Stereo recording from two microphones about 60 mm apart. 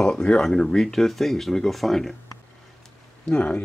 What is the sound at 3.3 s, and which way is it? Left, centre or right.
Speech, left.